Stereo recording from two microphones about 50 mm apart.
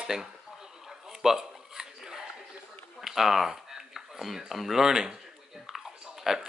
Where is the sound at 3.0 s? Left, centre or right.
Centre.